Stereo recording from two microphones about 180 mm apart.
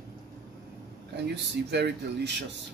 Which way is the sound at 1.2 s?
70° right (ahead or behind).